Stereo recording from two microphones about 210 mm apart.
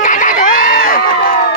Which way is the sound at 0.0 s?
35° left (ahead or behind).